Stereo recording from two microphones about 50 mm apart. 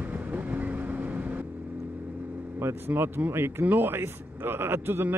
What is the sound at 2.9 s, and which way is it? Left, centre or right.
Speech, right.